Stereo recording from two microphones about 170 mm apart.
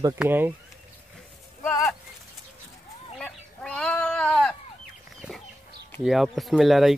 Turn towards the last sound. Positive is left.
turn(degrees=0)  # may be behind; listen again after turning